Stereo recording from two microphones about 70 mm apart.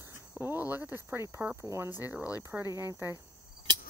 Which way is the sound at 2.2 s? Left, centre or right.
Centre.